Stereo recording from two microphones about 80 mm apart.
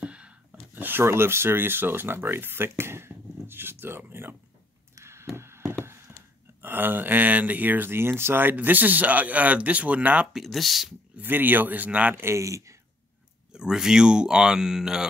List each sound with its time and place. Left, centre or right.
0.0 s a sound: centre
0.8 s speech: right
4.9 s a sound: right
6.6 s speech: right
10.3 s speech: centre
11.1 s speech: right
12.2 s speech: right
13.5 s speech: centre